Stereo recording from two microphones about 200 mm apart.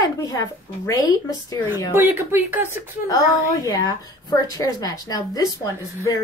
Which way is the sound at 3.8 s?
20° left (ahead or behind).